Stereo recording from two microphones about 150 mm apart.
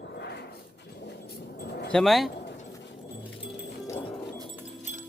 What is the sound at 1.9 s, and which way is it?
Speech, 5° left (ahead or behind).